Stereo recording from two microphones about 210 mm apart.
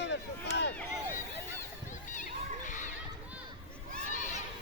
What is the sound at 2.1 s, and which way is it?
Children playing, 35° left (ahead or behind).